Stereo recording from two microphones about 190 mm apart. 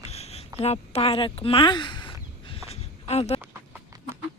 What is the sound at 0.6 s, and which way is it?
Speech, 30° left (ahead or behind).